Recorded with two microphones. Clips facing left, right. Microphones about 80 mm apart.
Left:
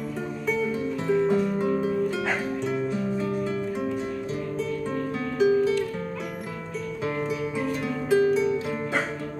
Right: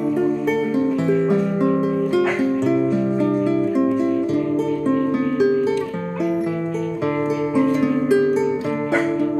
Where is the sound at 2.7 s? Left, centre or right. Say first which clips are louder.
Right 9 dB; right.